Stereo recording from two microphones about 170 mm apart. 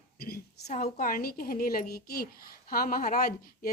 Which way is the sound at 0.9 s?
55° left (ahead or behind).